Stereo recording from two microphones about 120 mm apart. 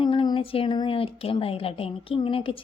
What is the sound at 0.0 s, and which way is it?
Speech, 45° left (ahead or behind).